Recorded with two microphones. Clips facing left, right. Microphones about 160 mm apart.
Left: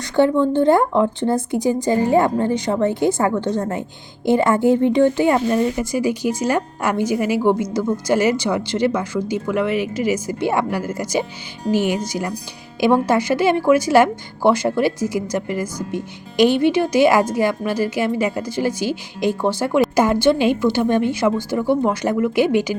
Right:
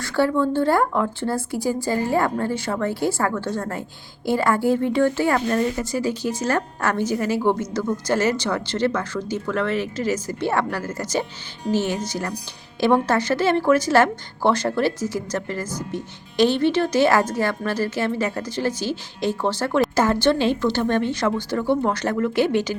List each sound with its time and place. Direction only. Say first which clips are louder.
0.0 s speech: left 4 dB; 20° left (ahead or behind)